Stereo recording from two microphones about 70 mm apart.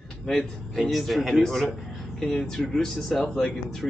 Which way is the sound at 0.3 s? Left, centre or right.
Centre.